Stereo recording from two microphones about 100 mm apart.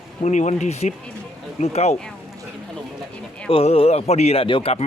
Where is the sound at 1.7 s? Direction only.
90° left.